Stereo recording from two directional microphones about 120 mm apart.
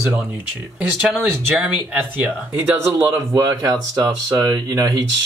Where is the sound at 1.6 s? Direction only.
15° right (ahead or behind).